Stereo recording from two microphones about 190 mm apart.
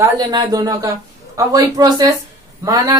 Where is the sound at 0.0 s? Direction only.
20° right (ahead or behind).